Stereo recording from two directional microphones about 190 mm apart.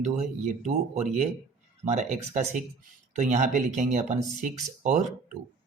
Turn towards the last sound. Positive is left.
turn(degrees=-40)  # may be behind; listen again after turning